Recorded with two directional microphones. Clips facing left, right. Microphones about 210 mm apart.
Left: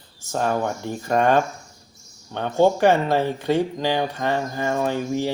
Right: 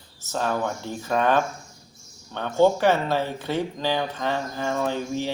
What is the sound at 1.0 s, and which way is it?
Speech, 50° left (ahead or behind).